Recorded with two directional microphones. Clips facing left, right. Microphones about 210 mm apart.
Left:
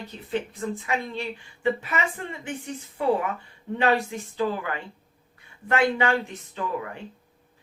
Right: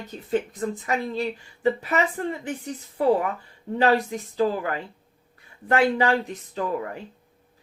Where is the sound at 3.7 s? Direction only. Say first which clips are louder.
Right 2 dB; 35° right (ahead or behind).